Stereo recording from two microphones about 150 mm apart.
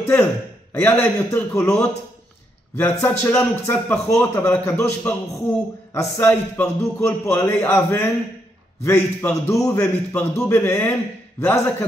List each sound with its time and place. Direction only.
0.0 s a man's voice: 15° left (ahead or behind)
2.8 s a man's voice: 15° left (ahead or behind)